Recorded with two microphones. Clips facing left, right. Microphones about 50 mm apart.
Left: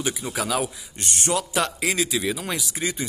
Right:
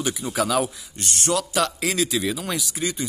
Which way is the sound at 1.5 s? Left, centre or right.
Centre.